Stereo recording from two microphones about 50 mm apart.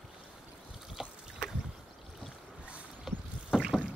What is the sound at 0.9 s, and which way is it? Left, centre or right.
Boat, centre.